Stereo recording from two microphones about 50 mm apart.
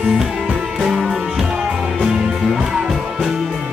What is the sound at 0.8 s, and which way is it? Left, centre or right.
Music, centre.